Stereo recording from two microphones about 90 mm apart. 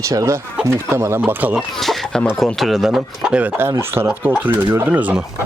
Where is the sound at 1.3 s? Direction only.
20° right (ahead or behind).